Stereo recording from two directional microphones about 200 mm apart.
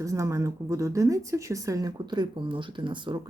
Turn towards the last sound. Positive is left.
turn(degrees=-25)  # may be behind; listen again after turning